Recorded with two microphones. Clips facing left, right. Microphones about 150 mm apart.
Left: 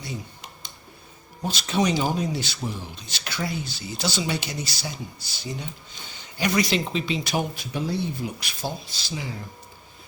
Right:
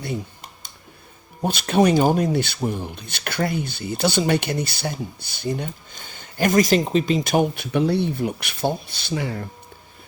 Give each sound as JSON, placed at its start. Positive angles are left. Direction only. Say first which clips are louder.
{"t": 0.0, "sound": "computer keyboard", "louder": "right 7 dB", "side_deg": -55}
{"t": 1.4, "sound": "speech", "louder": "right 6 dB", "side_deg": -55}